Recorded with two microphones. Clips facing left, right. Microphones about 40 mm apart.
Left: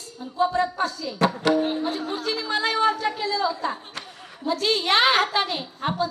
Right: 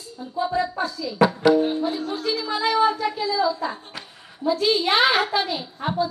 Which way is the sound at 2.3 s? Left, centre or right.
Centre.